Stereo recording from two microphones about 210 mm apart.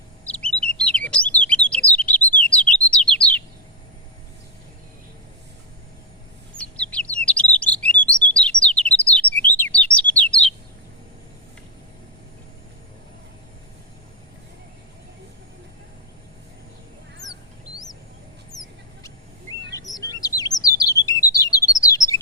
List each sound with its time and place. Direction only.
0.3 s bird: 5° left (ahead or behind)
6.9 s bird: 5° left (ahead or behind)
9.6 s chirp: 5° left (ahead or behind)
19.0 s chirp: 15° left (ahead or behind)